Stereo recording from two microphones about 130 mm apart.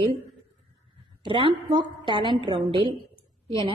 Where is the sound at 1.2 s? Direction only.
40° right (ahead or behind).